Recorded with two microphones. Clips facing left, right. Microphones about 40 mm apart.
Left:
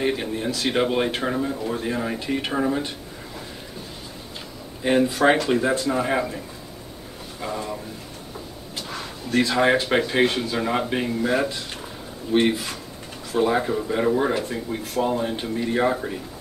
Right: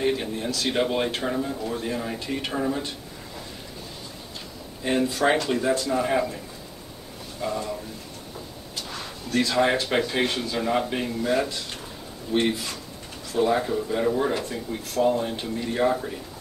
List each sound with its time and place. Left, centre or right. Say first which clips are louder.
0.0 s speech: left 1 dB; centre
4.8 s speech: left 4 dB; centre
7.4 s speech: right 1 dB; centre
9.3 s speech: left 3 dB; centre